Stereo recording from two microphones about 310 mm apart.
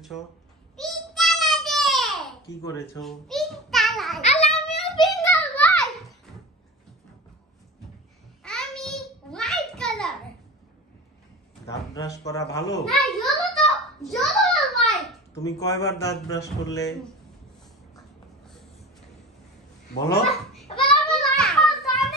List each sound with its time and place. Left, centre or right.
0.7 s child singing: centre
3.0 s a child's voice: centre
4.2 s a child's voice: left
4.6 s child singing: centre
5.0 s a sound: centre
8.5 s a sound: centre
11.6 s a man's voice: centre
12.8 s a sound: centre
15.4 s a man's voice: centre
20.7 s child singing: centre
21.1 s children playing: centre